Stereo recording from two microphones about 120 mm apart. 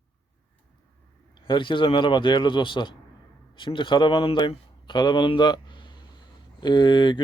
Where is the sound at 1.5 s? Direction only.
45° left (ahead or behind).